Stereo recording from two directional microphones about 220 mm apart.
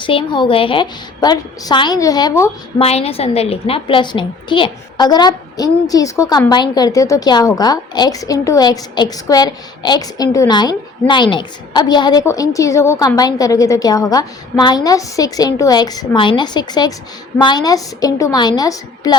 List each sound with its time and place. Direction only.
0.0 s a woman's voice: 25° left (ahead or behind)
2.7 s a woman's voice: 25° left (ahead or behind)